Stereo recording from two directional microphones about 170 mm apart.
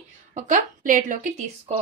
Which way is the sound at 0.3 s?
45° right (ahead or behind).